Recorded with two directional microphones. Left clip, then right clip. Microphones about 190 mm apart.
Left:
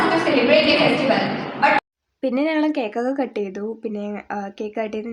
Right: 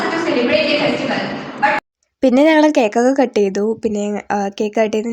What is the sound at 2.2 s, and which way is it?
A woman's voice, 40° right (ahead or behind).